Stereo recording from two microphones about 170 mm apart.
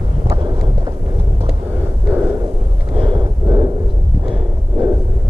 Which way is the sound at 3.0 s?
30° right (ahead or behind).